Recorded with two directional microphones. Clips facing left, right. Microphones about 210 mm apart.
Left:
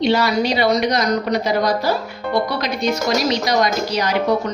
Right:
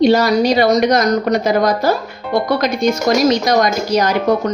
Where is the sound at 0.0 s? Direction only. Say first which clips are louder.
Right 5 dB; 45° right (ahead or behind).